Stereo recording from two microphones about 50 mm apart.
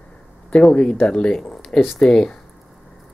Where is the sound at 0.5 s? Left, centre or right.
Left.